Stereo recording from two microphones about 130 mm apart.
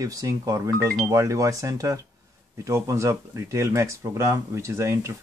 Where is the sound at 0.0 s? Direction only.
25° right (ahead or behind).